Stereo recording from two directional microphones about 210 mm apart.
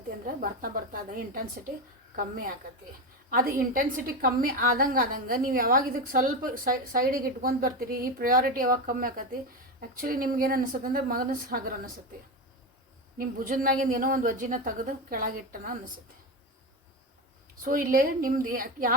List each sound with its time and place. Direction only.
0.4 s a woman's voice: 40° right (ahead or behind)
13.1 s a woman's voice: 40° right (ahead or behind)
17.6 s a woman's voice: 40° right (ahead or behind)